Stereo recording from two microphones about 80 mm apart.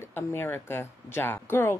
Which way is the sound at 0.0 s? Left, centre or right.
Left.